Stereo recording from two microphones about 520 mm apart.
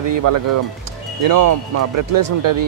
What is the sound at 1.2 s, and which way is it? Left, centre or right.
Speech, right.